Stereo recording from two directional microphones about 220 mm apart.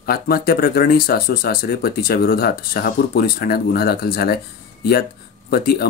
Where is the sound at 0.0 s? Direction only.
45° left (ahead or behind).